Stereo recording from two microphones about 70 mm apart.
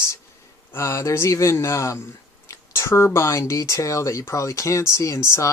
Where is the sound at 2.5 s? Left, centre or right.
Left.